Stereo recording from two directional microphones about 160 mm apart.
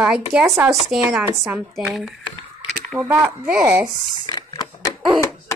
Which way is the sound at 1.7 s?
Centre (ahead or behind).